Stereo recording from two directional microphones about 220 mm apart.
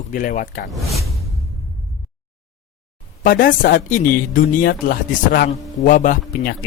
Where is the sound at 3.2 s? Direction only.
40° left (ahead or behind).